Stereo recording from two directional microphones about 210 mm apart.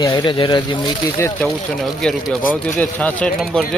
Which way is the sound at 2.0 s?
Centre (ahead or behind).